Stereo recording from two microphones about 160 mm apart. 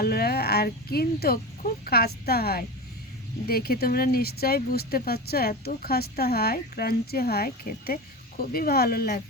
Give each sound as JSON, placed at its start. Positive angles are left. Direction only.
{"t": 0.0, "sound": "speech", "side_deg": 75}